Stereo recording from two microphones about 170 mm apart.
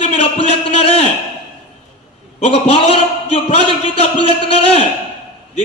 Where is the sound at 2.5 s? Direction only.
35° left (ahead or behind).